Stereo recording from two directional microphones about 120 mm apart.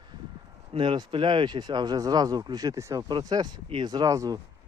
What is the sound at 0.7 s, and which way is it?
Speech, 45° right (ahead or behind).